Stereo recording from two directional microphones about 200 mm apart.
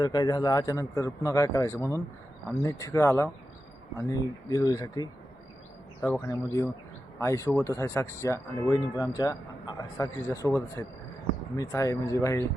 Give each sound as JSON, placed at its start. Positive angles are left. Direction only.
{"t": 0.0, "sound": "speech", "side_deg": 20}